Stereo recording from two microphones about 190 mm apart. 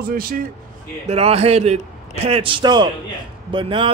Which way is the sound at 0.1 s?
50° right (ahead or behind).